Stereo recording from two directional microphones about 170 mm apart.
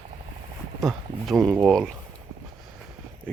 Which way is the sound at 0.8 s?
Centre (ahead or behind).